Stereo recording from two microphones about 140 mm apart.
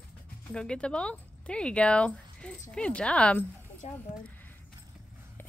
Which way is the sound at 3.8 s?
55° left (ahead or behind).